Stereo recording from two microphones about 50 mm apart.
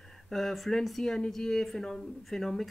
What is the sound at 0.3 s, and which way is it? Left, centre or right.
Speech, centre.